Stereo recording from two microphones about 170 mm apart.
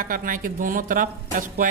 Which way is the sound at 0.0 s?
55° right (ahead or behind).